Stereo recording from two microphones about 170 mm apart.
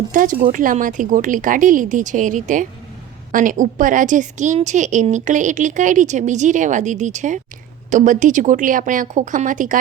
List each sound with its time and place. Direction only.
0.1 s a woman's voice: 50° right (ahead or behind)